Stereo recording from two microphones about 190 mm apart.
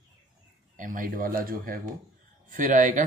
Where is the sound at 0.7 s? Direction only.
45° right (ahead or behind).